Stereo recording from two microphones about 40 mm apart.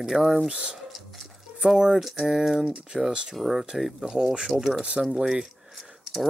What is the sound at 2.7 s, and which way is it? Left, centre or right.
Speech, right.